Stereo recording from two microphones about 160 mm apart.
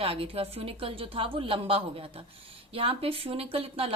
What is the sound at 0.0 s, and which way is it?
A woman's voice, 35° right (ahead or behind).